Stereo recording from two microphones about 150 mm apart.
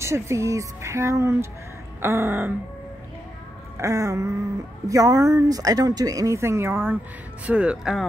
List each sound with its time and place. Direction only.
0.0 s speech: 20° right (ahead or behind)
3.7 s speech: 20° right (ahead or behind); by 8.1 s 5° right (ahead or behind)